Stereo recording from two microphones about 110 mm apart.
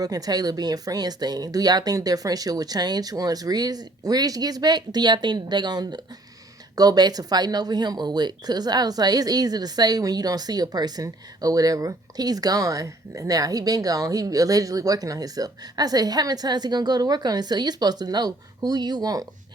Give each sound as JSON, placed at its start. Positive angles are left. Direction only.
{"t": 0.0, "sound": "speech", "side_deg": -35}